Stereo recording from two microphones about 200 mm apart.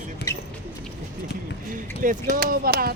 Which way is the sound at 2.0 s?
45° right (ahead or behind).